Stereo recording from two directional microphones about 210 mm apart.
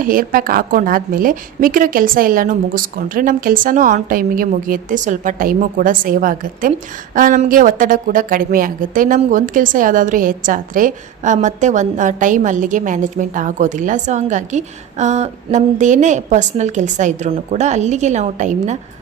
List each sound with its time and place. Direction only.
0.0 s a woman's voice: 40° right (ahead or behind)